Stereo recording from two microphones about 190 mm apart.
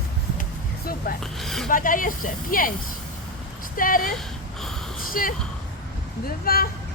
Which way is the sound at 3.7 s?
45° left (ahead or behind).